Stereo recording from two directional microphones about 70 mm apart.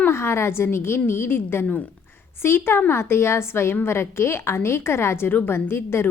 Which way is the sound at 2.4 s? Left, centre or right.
Left.